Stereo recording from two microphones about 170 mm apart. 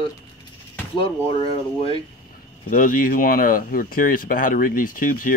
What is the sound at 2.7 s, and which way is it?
Speech, 55° left (ahead or behind).